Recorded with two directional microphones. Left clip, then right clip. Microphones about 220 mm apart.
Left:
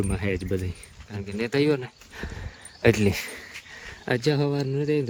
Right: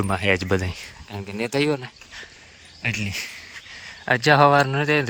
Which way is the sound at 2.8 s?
25° left (ahead or behind).